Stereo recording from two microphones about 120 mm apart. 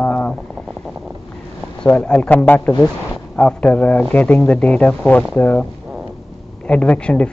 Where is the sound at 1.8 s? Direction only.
10° left (ahead or behind).